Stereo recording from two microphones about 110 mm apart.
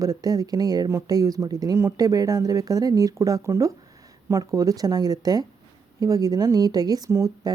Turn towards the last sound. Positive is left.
turn(degrees=-30)  # may be behind; listen again after turning